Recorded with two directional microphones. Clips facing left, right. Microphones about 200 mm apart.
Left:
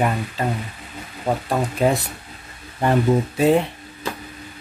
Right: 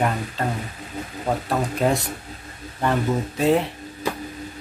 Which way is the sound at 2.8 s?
15° left (ahead or behind).